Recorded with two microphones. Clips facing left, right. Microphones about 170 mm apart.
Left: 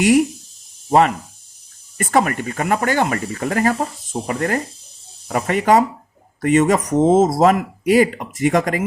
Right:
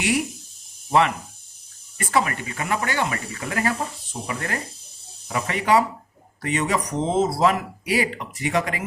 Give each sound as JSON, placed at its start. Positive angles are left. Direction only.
{"t": 0.9, "sound": "speech", "side_deg": 45}